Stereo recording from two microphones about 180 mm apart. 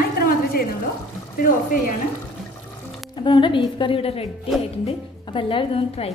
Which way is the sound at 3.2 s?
25° left (ahead or behind).